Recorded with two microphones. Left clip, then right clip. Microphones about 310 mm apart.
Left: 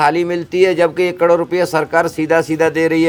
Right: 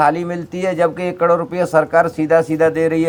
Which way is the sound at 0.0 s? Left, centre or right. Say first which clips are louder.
Left 1 dB; left.